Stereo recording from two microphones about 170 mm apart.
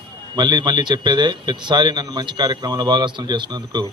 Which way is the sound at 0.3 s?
25° right (ahead or behind).